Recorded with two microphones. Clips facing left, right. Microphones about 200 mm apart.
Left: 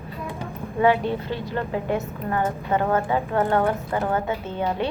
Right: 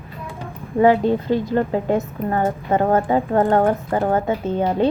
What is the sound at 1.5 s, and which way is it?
A woman's voice, 40° right (ahead or behind).